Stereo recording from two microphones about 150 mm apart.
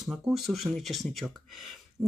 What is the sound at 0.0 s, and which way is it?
Speech, centre (ahead or behind).